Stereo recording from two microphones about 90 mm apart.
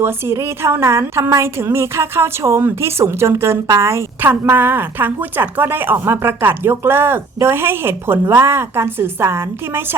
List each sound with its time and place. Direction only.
0.0 s a woman's voice: 30° right (ahead or behind)